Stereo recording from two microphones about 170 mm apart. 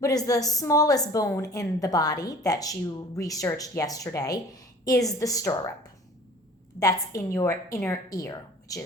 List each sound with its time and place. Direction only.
0.0 s a woman's voice: 20° left (ahead or behind)
6.7 s a woman's voice: 20° left (ahead or behind)